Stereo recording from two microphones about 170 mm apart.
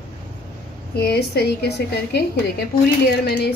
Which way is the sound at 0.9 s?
70° left (ahead or behind).